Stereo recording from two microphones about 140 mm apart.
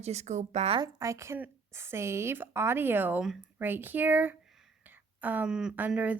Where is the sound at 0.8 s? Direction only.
25° right (ahead or behind).